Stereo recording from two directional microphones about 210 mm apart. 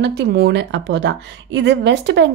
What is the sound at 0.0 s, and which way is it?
A woman's voice, 50° right (ahead or behind).